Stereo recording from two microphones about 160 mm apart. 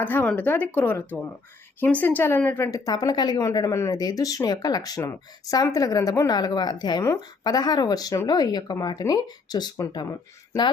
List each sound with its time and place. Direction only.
0.0 s a woman's voice: 10° left (ahead or behind)